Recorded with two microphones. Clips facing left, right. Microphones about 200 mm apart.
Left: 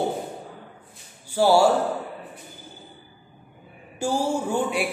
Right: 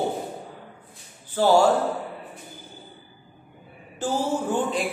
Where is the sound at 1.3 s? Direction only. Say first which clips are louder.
Even; 10° left (ahead or behind).